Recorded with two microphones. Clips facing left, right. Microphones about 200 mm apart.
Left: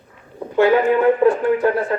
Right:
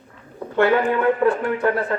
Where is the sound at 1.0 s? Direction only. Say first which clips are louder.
Left 4 dB; 20° left (ahead or behind).